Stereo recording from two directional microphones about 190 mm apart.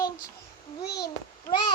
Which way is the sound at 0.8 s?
60° left (ahead or behind).